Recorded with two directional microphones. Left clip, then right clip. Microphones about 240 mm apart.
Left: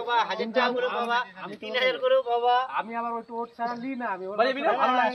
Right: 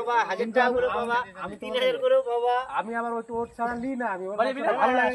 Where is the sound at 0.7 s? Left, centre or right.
Right.